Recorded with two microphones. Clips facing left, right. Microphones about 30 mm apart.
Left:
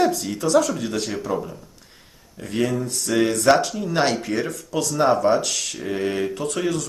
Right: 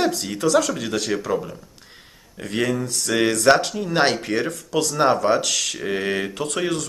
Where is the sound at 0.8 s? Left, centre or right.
Right.